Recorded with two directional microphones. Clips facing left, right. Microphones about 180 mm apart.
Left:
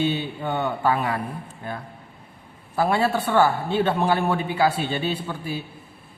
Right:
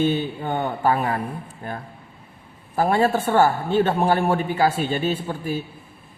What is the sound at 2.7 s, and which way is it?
Speech, 45° right (ahead or behind).